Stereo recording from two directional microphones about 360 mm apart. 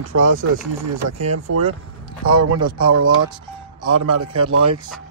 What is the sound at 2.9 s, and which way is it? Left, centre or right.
Speech, right.